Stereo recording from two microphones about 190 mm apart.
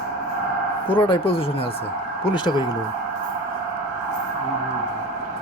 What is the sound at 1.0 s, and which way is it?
Speech, 30° left (ahead or behind).